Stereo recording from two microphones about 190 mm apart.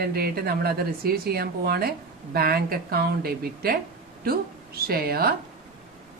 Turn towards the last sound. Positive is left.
turn(degrees=-55)  # may be behind; listen again after turning